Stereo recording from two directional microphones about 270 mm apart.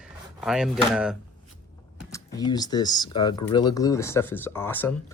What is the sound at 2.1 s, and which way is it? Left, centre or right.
Speech, centre.